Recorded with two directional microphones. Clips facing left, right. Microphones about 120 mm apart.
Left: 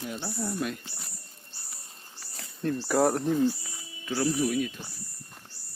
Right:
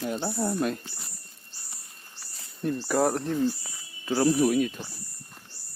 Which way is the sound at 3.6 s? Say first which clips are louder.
Even; 40° right (ahead or behind).